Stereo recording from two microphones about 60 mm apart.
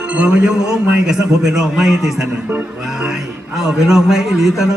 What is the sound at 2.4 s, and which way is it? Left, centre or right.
Speech, right.